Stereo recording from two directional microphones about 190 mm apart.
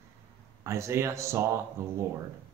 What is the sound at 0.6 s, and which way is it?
Speech, 15° right (ahead or behind).